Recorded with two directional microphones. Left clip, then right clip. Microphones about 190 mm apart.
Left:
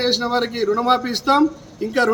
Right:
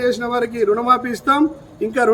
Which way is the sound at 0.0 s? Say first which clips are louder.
Right 1 dB; centre (ahead or behind).